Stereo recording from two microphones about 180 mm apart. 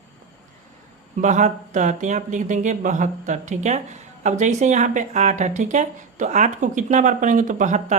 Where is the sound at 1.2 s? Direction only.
45° right (ahead or behind).